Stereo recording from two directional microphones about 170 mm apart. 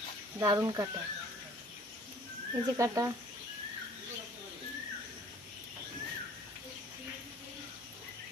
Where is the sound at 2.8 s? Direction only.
20° right (ahead or behind).